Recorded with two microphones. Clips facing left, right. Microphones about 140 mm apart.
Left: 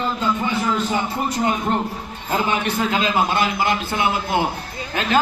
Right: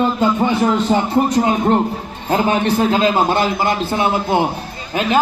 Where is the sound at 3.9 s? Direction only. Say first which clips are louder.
Right 4 dB; 25° right (ahead or behind).